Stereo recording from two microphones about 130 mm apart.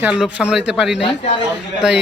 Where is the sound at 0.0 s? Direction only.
5° right (ahead or behind).